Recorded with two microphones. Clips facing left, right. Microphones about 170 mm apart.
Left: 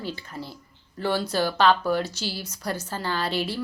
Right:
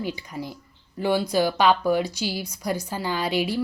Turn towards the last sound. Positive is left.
turn(degrees=-15)  # may be behind; listen again after turning